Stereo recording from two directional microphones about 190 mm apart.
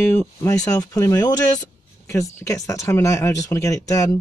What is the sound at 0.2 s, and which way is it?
Speech, 10° left (ahead or behind).